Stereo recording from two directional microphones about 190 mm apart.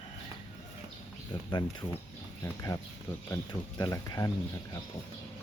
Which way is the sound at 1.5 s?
25° left (ahead or behind).